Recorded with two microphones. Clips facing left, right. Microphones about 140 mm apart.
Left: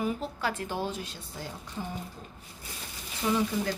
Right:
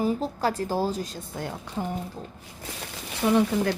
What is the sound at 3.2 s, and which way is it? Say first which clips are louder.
Speech: right 6 dB; 65° right (ahead or behind).